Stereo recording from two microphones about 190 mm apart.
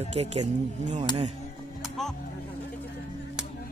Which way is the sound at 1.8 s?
Centre (ahead or behind).